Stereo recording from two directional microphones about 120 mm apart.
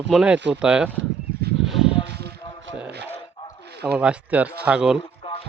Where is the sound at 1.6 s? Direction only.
5° right (ahead or behind).